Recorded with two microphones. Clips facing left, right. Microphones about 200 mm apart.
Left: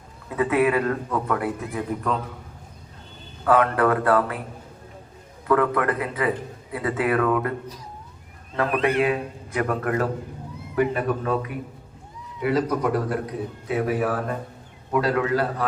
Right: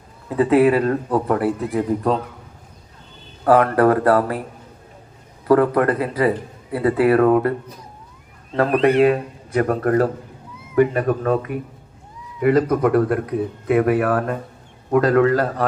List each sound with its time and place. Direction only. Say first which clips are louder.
0.3 s a man's voice: right 6 dB; 30° right (ahead or behind)
3.4 s a man's voice: right 5 dB; 35° right (ahead or behind)
5.5 s a man's voice: right 6 dB; 35° right (ahead or behind)
8.5 s a man's voice: right 6 dB; 40° right (ahead or behind); by 14.3 s 60° right (ahead or behind)
14.8 s a man's voice: right 7 dB; 50° right (ahead or behind)